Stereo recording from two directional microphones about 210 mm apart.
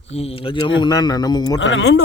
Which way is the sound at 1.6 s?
60° left (ahead or behind).